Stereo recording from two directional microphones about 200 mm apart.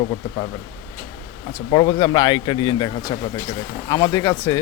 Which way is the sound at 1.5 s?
20° left (ahead or behind).